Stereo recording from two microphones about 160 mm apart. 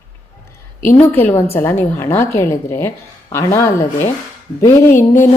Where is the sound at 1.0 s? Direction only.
10° left (ahead or behind).